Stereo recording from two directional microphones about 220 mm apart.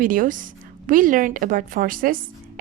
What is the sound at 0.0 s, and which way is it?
A woman's voice, 40° right (ahead or behind).